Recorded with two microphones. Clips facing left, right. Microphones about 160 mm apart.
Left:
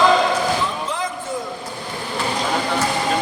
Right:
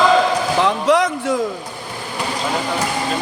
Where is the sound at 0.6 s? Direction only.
75° right (ahead or behind).